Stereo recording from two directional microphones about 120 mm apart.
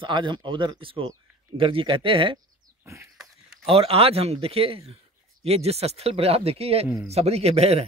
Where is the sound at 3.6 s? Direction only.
55° right (ahead or behind).